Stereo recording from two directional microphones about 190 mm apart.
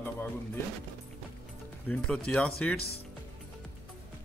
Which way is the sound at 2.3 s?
5° left (ahead or behind).